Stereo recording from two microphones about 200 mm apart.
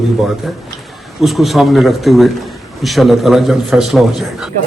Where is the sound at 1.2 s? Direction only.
Centre (ahead or behind).